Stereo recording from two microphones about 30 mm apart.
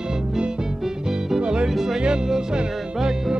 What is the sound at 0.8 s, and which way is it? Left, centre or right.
Music, centre.